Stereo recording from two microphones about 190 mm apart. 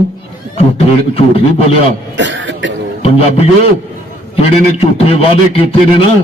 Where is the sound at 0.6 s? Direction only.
30° left (ahead or behind).